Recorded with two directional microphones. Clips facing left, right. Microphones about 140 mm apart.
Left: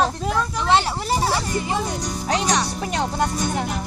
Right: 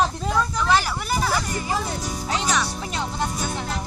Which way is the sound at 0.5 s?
25° left (ahead or behind).